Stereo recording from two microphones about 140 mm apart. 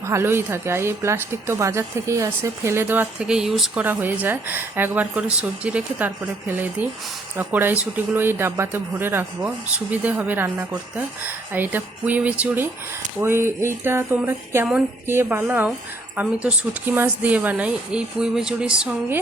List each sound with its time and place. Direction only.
0.1 s a woman's voice: 15° right (ahead or behind)
3.8 s a woman's voice: 15° right (ahead or behind)
7.3 s a woman's voice: 15° right (ahead or behind)